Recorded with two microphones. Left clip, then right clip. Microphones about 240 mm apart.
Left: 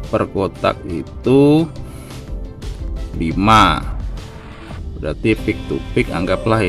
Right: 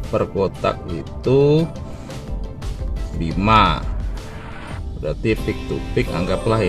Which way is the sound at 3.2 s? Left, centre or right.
Left.